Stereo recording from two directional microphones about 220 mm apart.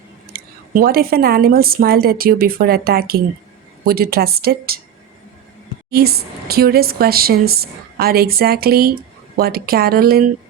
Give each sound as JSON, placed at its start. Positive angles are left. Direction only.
{"t": 0.3, "sound": "a woman's voice", "side_deg": -40}
{"t": 5.9, "sound": "a woman's voice", "side_deg": -45}